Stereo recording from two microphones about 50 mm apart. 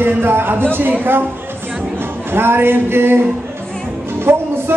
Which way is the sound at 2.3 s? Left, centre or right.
Right.